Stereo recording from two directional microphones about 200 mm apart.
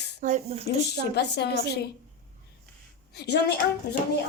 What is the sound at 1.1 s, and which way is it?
Speech, 55° left (ahead or behind).